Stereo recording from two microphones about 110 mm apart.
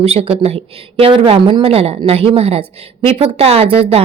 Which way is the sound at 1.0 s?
55° right (ahead or behind).